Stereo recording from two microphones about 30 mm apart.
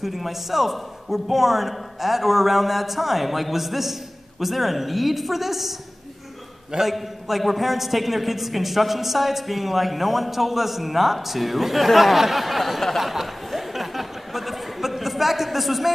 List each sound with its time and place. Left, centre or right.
0.0 s a man's voice: centre
6.8 s a man's voice: centre
13.0 s a sound: centre